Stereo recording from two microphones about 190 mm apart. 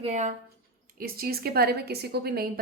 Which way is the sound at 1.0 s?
55° right (ahead or behind).